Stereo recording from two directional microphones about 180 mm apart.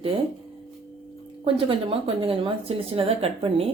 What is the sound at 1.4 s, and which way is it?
A woman's voice, 30° right (ahead or behind).